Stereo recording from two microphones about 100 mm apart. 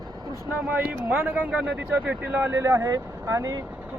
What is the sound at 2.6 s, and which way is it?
Speech, 30° right (ahead or behind).